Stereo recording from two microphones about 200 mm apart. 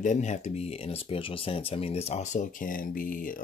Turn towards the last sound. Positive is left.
turn(degrees=45)  # may be behind; listen again after turning